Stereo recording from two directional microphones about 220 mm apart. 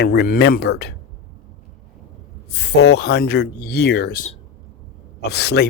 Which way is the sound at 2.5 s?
50° left (ahead or behind).